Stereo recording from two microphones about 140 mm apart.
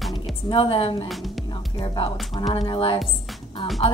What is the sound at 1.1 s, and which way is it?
Speech, centre (ahead or behind).